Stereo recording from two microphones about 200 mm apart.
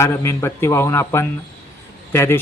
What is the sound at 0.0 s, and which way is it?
Speech, 15° left (ahead or behind).